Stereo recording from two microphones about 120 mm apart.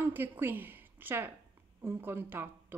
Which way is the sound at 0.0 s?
15° right (ahead or behind).